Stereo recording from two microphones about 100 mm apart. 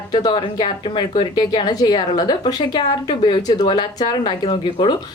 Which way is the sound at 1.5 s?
45° left (ahead or behind).